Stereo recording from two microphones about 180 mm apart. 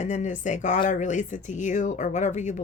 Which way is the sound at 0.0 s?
40° left (ahead or behind).